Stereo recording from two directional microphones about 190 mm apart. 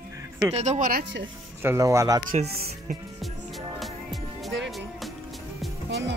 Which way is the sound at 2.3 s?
40° right (ahead or behind).